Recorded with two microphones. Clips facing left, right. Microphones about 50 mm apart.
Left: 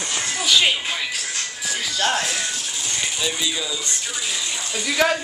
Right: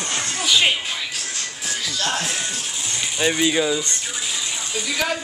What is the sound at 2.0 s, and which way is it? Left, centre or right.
Music, left.